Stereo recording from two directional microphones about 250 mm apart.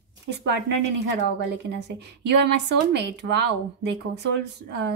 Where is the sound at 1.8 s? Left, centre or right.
Right.